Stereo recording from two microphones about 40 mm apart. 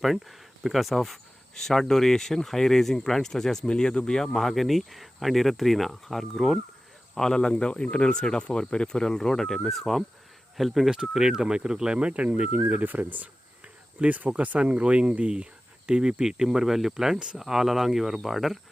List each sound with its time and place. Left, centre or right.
0.0 s speech: centre
3.7 s speech: centre
4.4 s speech: centre
7.2 s speech: centre
11.1 s speech: centre; by 12.6 s right
12.8 s speech: right
14.6 s speech: right
15.9 s speech: right; by 18.6 s centre